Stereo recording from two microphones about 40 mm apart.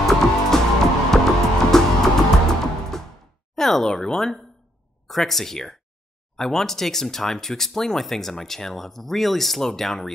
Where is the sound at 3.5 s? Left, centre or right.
Centre.